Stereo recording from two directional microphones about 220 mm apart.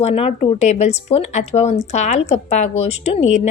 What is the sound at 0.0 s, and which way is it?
Speech, 25° left (ahead or behind).